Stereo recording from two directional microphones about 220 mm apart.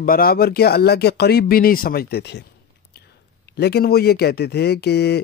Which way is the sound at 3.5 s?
45° left (ahead or behind).